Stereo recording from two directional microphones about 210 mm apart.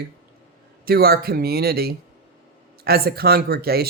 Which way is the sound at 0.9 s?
45° right (ahead or behind).